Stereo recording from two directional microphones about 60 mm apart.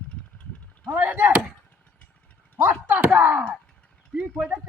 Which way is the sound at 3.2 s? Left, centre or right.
Right.